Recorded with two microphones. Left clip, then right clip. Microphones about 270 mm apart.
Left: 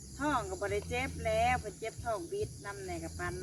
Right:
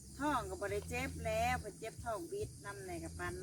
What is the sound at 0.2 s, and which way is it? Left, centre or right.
Speech, centre.